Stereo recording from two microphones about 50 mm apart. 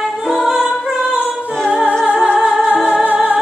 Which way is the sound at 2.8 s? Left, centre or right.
Right.